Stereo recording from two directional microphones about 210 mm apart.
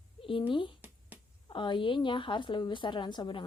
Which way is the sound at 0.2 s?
25° left (ahead or behind).